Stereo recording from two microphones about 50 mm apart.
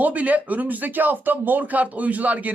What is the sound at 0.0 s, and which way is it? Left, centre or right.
A man's voice, right.